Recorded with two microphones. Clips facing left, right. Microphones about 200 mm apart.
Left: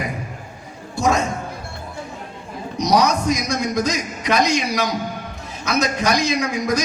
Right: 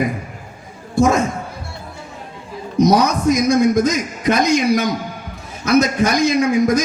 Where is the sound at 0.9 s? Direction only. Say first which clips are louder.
Right 5 dB; 50° right (ahead or behind).